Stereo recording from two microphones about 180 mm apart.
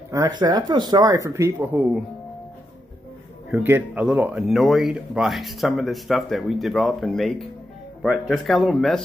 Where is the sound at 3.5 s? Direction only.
10° right (ahead or behind).